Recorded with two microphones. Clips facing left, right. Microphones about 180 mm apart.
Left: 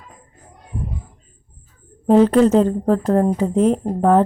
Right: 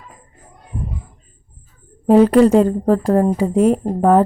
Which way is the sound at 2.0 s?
10° right (ahead or behind).